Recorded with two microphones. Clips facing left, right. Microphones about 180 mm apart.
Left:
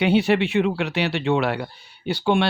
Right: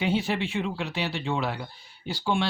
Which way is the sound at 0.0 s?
70° left (ahead or behind).